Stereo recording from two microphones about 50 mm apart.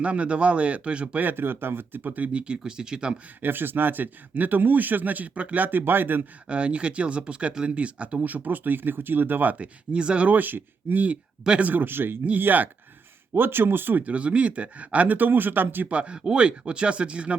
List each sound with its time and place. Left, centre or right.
0.0 s speech: right
1.2 s speech: right; by 3.2 s centre
3.4 s speech: right
6.5 s speech: right
9.9 s speech: right
10.2 s speech: right
14.0 s speech: right
15.9 s speech: right